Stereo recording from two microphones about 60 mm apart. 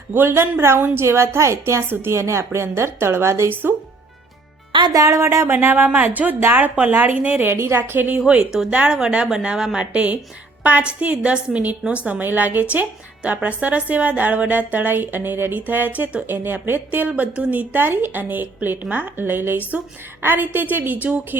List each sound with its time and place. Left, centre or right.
0.1 s a woman's voice: right
1.9 s a woman's voice: right
3.5 s a woman's voice: right
4.9 s a woman's voice: right
5.5 s a woman's voice: right
7.4 s a woman's voice: right
8.7 s a woman's voice: centre
16.3 s a woman's voice: right
17.8 s a woman's voice: right